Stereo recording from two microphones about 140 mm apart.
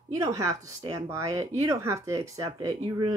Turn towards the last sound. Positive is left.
turn(degrees=-25)  # may be behind; listen again after turning